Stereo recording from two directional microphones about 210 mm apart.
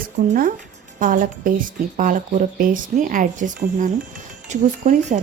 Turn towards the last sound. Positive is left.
turn(degrees=-35)  # may be behind; listen again after turning